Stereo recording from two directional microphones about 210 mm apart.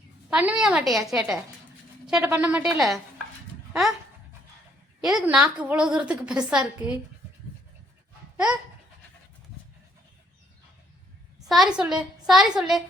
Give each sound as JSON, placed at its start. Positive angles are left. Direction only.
{"t": 0.3, "sound": "a woman's voice", "side_deg": -5}
{"t": 5.0, "sound": "a woman's voice", "side_deg": -5}
{"t": 11.4, "sound": "a woman's voice", "side_deg": 0}